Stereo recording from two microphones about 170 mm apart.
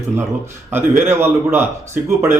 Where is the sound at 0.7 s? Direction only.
15° right (ahead or behind).